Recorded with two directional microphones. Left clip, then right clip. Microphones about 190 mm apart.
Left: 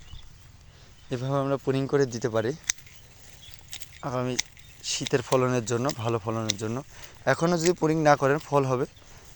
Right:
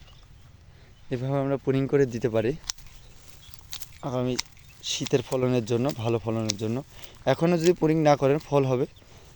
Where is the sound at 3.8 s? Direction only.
25° right (ahead or behind).